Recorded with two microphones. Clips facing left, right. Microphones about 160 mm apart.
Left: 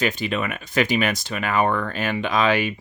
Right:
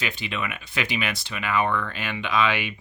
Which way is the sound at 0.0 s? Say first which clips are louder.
Left 7 dB; 45° left (ahead or behind).